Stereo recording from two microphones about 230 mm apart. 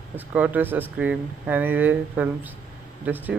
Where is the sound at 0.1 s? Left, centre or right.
Centre.